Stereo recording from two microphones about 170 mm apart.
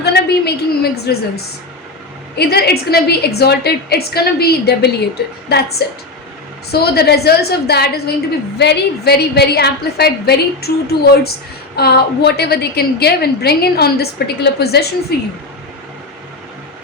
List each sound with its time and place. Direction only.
0.0 s a woman's voice: 70° left (ahead or behind)
2.3 s a woman's voice: 70° left (ahead or behind)